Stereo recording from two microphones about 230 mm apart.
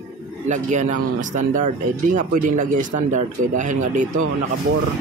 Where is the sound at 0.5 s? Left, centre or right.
Right.